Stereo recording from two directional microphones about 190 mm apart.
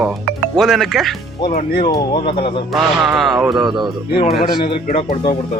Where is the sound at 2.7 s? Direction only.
Centre (ahead or behind).